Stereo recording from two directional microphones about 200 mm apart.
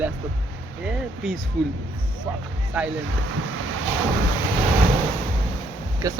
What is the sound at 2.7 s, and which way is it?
Speech, 5° right (ahead or behind).